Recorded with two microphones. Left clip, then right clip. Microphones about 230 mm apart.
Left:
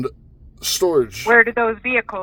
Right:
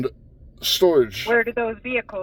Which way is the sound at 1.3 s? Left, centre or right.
Centre.